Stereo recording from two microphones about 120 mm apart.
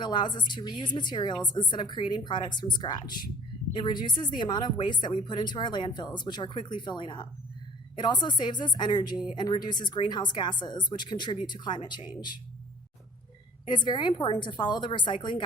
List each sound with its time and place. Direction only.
0.0 s a woman's voice: 40° left (ahead or behind)
13.7 s a woman's voice: 40° left (ahead or behind)